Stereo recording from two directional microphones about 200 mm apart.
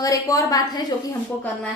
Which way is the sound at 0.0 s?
15° left (ahead or behind).